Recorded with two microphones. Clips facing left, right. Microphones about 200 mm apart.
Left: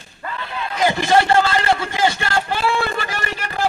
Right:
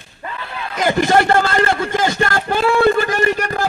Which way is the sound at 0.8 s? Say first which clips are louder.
Right 2 dB; 50° right (ahead or behind).